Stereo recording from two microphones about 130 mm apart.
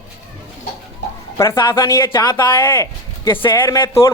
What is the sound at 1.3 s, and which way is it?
A man's voice, 20° left (ahead or behind).